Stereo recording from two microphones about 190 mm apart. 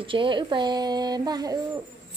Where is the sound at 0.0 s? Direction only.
25° right (ahead or behind).